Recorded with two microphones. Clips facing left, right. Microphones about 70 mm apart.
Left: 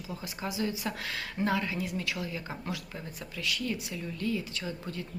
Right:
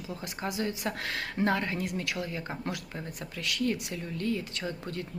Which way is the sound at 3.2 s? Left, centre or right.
Right.